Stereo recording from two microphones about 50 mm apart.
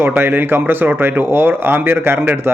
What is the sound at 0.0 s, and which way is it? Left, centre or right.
A man's voice, right.